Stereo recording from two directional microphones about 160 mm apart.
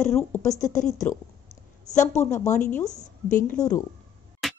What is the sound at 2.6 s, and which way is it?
Speech, 10° left (ahead or behind).